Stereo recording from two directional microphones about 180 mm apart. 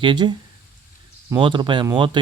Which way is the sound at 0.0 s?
25° right (ahead or behind).